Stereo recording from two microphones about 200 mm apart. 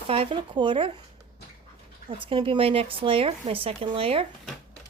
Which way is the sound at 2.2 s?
25° right (ahead or behind).